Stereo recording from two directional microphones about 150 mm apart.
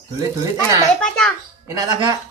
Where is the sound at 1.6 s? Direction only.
25° right (ahead or behind).